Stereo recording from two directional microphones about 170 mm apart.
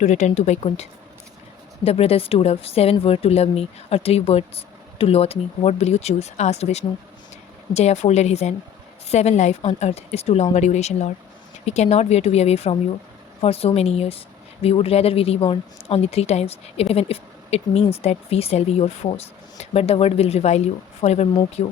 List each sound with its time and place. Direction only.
0.0 s a woman's voice: 45° left (ahead or behind)